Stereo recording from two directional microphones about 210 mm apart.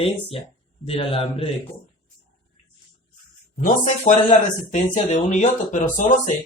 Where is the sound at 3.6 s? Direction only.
40° left (ahead or behind).